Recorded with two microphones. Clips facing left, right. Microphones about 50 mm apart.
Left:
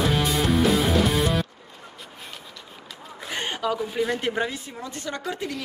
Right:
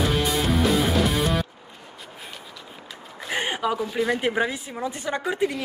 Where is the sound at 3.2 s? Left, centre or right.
Centre.